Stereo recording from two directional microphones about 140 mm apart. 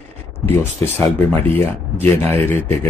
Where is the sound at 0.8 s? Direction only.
15° left (ahead or behind).